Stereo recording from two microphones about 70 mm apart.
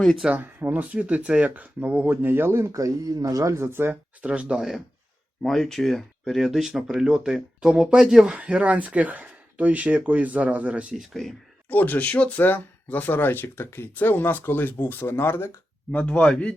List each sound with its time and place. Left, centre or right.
0.0 s speech: centre
0.3 s speech: right
2.0 s speech: right
2.7 s speech: right
4.2 s speech: centre
5.4 s speech: centre
10.9 s speech: centre
11.7 s speech: left
15.9 s speech: centre